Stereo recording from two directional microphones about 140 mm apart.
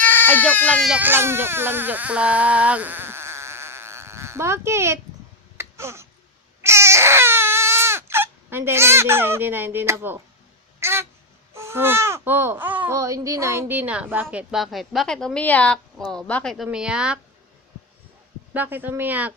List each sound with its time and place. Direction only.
0.0 s speech: 15° left (ahead or behind)
0.9 s speech: 10° right (ahead or behind)
5.5 s a sound: 20° right (ahead or behind)
6.6 s baby cry: 20° right (ahead or behind)
10.8 s cat: 20° right (ahead or behind)
11.5 s speech: 20° right (ahead or behind)
13.0 s a woman's voice: 25° right (ahead or behind); by 17.2 s 5° right (ahead or behind)
18.5 s speech: 15° right (ahead or behind)